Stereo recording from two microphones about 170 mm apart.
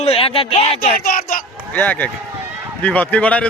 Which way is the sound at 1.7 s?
10° left (ahead or behind).